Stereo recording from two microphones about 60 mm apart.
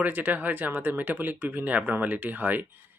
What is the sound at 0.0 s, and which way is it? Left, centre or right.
Speech, right.